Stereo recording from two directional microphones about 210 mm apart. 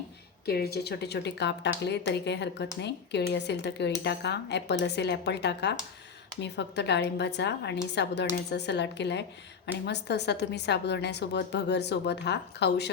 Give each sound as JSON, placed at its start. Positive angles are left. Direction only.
{"t": 0.4, "sound": "a woman's voice", "side_deg": 50}